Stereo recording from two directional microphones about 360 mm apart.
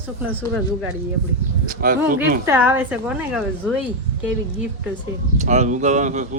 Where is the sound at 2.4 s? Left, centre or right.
Centre.